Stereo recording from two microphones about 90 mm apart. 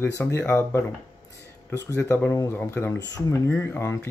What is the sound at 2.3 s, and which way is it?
Speech, 30° left (ahead or behind).